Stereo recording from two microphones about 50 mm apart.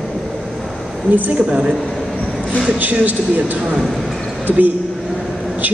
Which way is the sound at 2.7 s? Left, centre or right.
Right.